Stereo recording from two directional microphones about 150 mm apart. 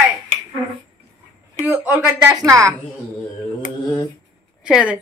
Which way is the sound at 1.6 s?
10° right (ahead or behind).